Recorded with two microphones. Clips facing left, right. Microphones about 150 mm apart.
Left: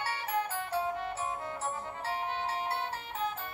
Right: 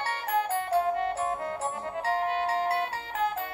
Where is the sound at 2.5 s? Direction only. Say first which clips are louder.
Right 7 dB; 85° right.